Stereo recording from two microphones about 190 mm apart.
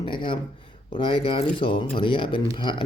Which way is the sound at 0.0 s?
25° left (ahead or behind).